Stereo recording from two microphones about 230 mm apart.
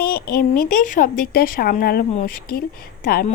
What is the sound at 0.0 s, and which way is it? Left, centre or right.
Speech, left.